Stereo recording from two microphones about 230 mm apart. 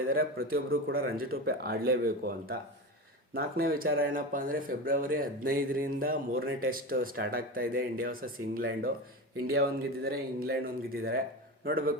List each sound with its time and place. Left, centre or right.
0.1 s speech: right